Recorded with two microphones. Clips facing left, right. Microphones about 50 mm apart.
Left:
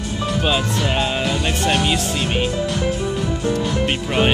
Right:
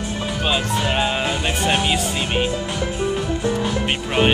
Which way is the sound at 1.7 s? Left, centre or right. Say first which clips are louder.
Left 1 dB; centre.